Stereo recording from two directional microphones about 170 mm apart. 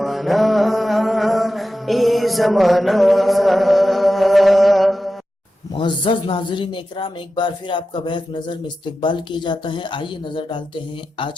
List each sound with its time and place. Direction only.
0.0 s music: centre (ahead or behind)
5.7 s speech: 30° left (ahead or behind)